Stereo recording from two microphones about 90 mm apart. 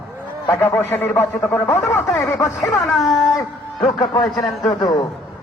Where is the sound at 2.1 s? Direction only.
5° left (ahead or behind).